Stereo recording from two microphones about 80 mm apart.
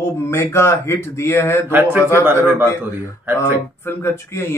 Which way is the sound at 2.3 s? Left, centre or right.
Right.